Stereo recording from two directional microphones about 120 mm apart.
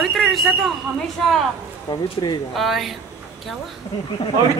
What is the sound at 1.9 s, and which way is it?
Speech, 35° left (ahead or behind).